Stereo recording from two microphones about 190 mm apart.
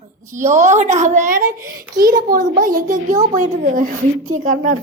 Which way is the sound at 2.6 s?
45° right (ahead or behind).